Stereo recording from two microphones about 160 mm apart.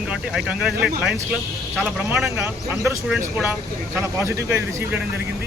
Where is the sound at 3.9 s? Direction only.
15° right (ahead or behind).